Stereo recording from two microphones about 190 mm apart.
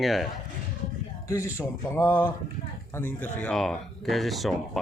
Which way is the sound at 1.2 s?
15° left (ahead or behind).